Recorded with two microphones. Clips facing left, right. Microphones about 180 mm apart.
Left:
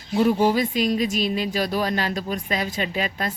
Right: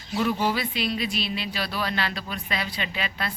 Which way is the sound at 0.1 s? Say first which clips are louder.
Left 6 dB; 40° left (ahead or behind).